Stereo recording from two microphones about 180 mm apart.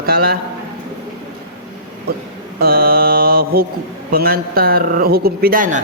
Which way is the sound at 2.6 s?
55° right (ahead or behind).